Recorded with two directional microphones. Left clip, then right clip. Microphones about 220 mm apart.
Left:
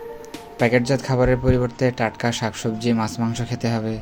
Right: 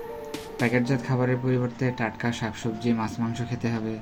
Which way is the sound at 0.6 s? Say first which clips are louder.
Left 7 dB; 50° left (ahead or behind).